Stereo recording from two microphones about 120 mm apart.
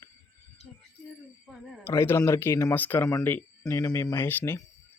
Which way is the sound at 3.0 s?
30° left (ahead or behind).